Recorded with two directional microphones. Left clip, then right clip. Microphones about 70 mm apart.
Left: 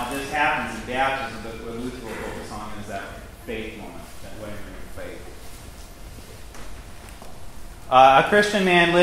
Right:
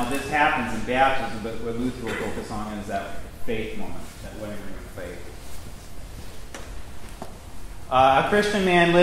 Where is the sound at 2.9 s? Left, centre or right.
Right.